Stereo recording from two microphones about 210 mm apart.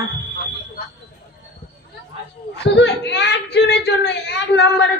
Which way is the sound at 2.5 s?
55° left (ahead or behind).